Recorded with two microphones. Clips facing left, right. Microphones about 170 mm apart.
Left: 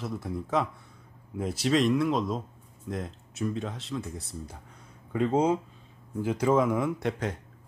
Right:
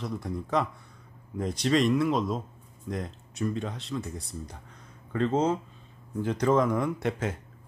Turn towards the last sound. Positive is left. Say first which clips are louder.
# even
turn(degrees=0)  # may be behind; listen again after turning